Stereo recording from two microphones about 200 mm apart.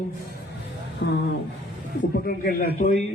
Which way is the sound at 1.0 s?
55° left (ahead or behind).